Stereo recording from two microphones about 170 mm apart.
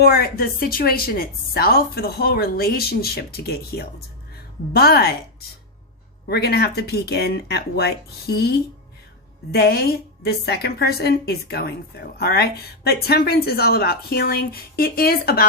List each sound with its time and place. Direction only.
0.0 s a woman's voice: 60° left (ahead or behind)